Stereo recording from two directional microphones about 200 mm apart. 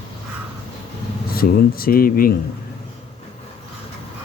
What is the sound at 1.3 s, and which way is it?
Speech, 50° left (ahead or behind).